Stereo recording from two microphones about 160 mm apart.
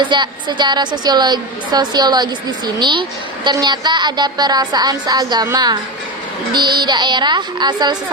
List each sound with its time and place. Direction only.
0.0 s a woman's voice: 30° right (ahead or behind)